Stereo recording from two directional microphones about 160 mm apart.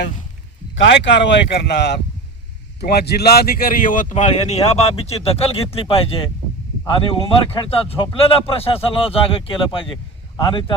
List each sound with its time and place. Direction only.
0.9 s speech: 90° left; by 10.8 s 30° left (ahead or behind)